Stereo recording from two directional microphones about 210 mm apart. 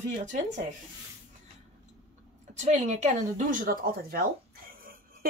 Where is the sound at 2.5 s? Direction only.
35° right (ahead or behind).